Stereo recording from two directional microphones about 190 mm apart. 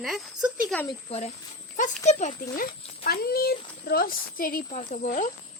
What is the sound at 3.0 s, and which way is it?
Speech, 55° left (ahead or behind).